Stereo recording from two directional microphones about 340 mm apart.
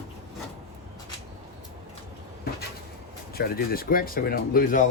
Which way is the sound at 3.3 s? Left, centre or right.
Left.